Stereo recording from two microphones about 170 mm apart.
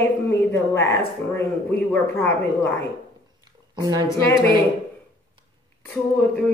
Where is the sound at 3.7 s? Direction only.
25° right (ahead or behind).